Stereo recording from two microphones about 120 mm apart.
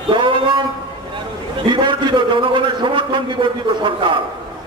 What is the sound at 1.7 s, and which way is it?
A man's voice, 40° right (ahead or behind).